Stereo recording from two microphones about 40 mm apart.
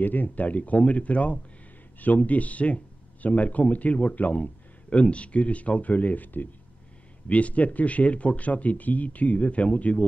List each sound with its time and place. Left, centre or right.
0.0 s speech: left